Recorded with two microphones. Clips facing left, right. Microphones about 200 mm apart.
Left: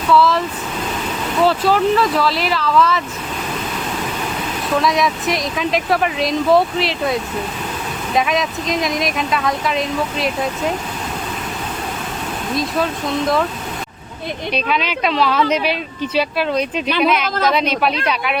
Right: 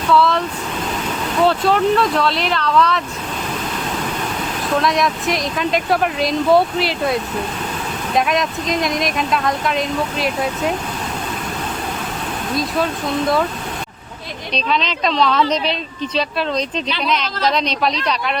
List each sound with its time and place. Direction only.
0.1 s speech: centre (ahead or behind)
4.7 s speech: centre (ahead or behind)
12.5 s speech: centre (ahead or behind)
14.5 s speech: 10° left (ahead or behind)
17.2 s a woman's voice: 50° left (ahead or behind)
17.5 s speech: 5° left (ahead or behind)